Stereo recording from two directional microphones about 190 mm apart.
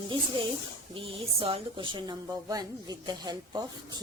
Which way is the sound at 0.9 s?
30° right (ahead or behind).